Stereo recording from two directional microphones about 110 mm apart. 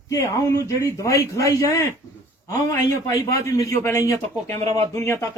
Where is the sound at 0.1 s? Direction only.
30° left (ahead or behind).